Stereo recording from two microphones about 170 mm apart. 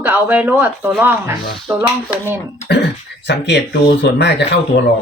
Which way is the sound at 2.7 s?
90° left.